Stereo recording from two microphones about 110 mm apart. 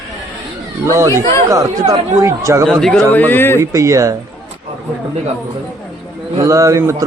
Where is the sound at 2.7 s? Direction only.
5° left (ahead or behind).